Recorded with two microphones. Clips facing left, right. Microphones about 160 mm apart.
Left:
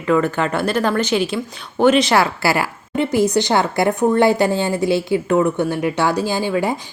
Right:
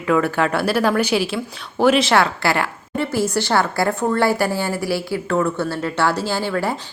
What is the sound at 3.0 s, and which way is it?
A woman's voice, 15° left (ahead or behind).